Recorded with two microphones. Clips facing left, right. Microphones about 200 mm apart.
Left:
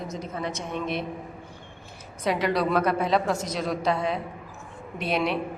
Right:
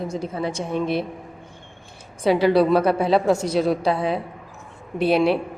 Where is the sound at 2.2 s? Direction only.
30° right (ahead or behind).